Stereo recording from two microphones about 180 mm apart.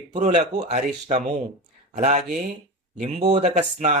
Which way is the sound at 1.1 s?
40° right (ahead or behind).